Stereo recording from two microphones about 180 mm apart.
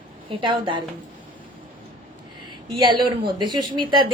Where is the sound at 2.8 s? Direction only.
25° right (ahead or behind).